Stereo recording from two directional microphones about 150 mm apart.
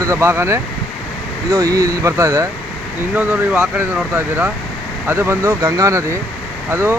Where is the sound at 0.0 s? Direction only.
20° right (ahead or behind).